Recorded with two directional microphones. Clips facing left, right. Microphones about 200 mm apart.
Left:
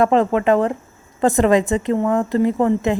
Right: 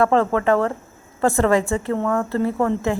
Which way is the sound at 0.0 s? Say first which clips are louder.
Left 2 dB; 15° left (ahead or behind).